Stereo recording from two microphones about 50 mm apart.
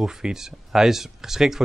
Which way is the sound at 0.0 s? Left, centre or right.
Centre.